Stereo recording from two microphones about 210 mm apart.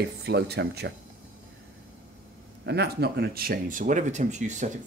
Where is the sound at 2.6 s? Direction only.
50° right (ahead or behind).